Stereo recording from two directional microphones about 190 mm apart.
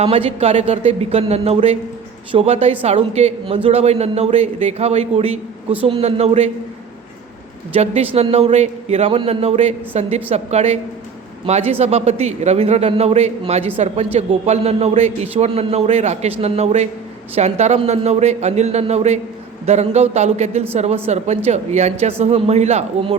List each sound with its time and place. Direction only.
0.0 s a man's voice: 30° right (ahead or behind)
7.7 s a man's voice: 35° right (ahead or behind)